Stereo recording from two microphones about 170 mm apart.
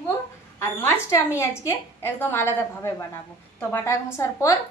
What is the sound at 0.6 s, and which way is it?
A woman's voice, 15° left (ahead or behind).